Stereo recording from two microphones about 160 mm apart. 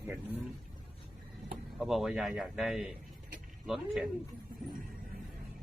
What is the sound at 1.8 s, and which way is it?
A man's voice, centre (ahead or behind).